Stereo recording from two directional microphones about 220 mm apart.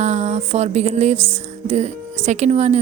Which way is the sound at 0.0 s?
30° right (ahead or behind).